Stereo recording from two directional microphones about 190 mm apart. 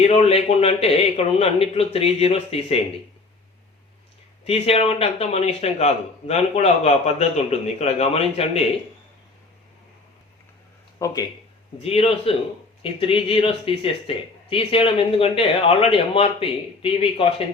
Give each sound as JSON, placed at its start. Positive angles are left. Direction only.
{"t": 0.0, "sound": "speech", "side_deg": 30}
{"t": 4.4, "sound": "speech", "side_deg": 30}
{"t": 11.0, "sound": "speech", "side_deg": 20}
{"t": 11.8, "sound": "speech", "side_deg": 30}